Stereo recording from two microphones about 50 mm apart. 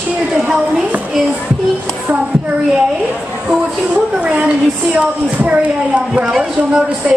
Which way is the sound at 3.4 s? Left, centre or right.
Right.